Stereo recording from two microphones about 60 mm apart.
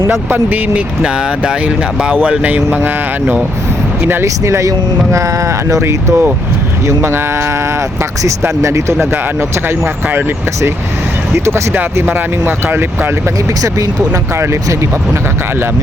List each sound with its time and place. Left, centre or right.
0.3 s speech: right
2.6 s speech: right
4.2 s speech: right
5.8 s speech: right
8.2 s speech: right
9.8 s speech: right
11.3 s speech: right
12.0 s speech: right